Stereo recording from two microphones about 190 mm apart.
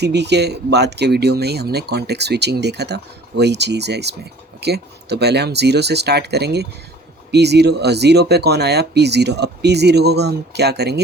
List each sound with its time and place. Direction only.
0.0 s speech: 60° right (ahead or behind)